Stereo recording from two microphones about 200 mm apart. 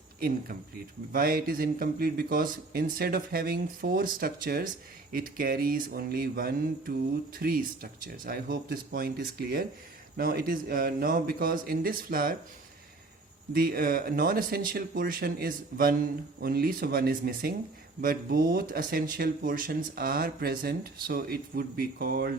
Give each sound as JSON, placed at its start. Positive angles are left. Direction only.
{"t": 0.2, "sound": "speech", "side_deg": -50}
{"t": 13.5, "sound": "speech", "side_deg": -45}